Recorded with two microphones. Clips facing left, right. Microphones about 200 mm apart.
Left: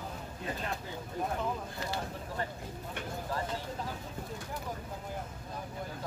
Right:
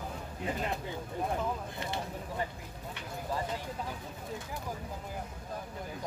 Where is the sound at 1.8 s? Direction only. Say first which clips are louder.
Even; 20° right (ahead or behind).